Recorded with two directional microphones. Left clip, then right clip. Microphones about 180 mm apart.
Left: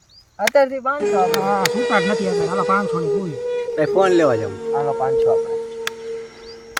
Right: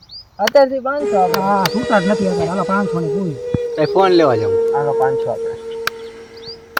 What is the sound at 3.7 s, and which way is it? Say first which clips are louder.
Speech: right 3 dB; 70° left (ahead or behind).